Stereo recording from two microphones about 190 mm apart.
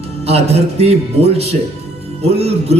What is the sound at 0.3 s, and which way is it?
A man's voice, 35° right (ahead or behind).